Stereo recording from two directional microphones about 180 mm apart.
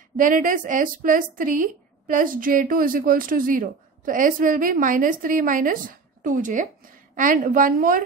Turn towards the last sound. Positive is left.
turn(degrees=-50)  # may be behind; listen again after turning